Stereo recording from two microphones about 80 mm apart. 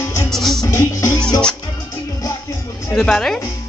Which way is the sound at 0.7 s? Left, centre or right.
Left.